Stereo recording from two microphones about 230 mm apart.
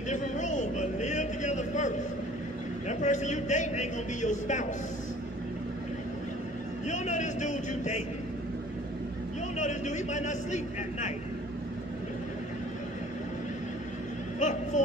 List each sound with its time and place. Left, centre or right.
0.1 s a sound: left
2.9 s a man's voice: left
6.9 s a man's voice: left
9.6 s a man's voice: left
14.4 s vehicle: left